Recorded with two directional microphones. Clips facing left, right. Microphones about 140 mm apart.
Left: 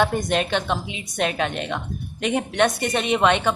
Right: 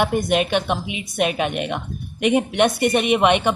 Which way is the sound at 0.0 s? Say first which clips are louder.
Right 2 dB; 10° right (ahead or behind).